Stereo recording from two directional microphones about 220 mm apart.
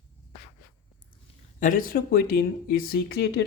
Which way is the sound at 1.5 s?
35° left (ahead or behind).